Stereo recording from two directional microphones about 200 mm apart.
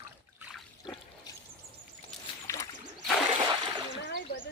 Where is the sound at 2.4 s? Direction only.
15° left (ahead or behind).